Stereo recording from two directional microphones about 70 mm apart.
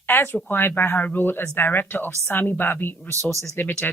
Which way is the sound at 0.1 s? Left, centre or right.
Left.